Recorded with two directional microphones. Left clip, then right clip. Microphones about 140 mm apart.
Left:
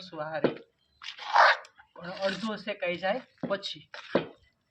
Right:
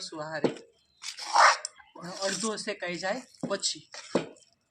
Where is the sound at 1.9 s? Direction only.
5° left (ahead or behind).